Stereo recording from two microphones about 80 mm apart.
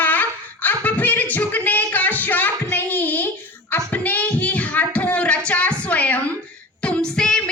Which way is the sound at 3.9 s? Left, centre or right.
Left.